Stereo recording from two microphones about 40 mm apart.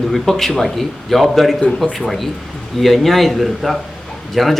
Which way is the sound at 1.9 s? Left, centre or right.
Centre.